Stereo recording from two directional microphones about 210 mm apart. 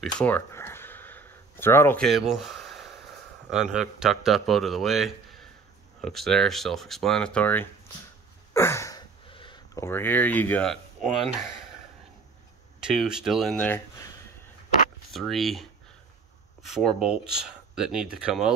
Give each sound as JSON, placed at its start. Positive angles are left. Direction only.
{"t": 0.0, "sound": "a sound", "side_deg": 5}
{"t": 3.4, "sound": "speech", "side_deg": -5}
{"t": 8.5, "sound": "a sound", "side_deg": 10}
{"t": 9.8, "sound": "speech", "side_deg": 10}
{"t": 12.8, "sound": "speech", "side_deg": 0}
{"t": 16.6, "sound": "speech", "side_deg": 0}